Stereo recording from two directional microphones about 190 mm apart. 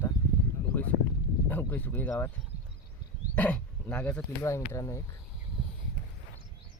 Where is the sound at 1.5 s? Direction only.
10° left (ahead or behind).